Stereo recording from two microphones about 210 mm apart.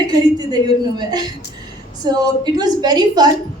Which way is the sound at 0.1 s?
20° right (ahead or behind).